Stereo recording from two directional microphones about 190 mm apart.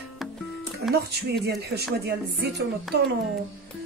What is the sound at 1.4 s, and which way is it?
A woman's voice, 60° right (ahead or behind).